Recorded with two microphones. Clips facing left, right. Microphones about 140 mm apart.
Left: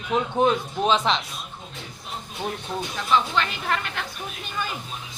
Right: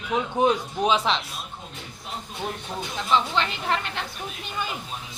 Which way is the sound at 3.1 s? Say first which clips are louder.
Left 1 dB; 25° right (ahead or behind).